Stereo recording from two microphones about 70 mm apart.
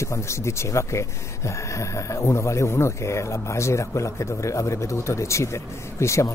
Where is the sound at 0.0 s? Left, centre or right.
Left.